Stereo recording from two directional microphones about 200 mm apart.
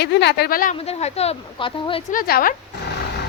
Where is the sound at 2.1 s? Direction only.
45° left (ahead or behind).